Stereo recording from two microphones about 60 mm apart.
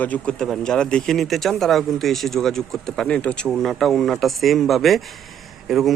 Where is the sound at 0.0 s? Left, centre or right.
Left.